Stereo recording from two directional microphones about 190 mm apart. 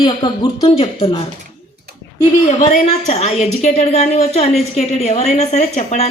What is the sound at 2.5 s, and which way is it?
A woman's voice, 35° left (ahead or behind).